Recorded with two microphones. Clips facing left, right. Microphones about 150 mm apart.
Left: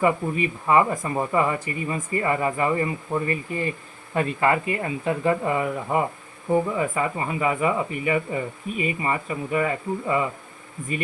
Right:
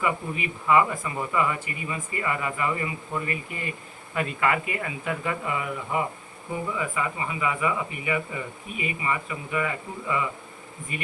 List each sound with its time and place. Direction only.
0.0 s speech: 35° left (ahead or behind)